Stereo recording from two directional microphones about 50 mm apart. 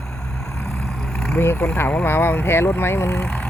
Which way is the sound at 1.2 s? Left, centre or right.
Left.